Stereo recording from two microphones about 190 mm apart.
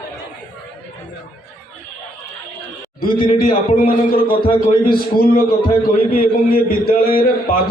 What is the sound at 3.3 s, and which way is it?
A man's voice, 50° left (ahead or behind).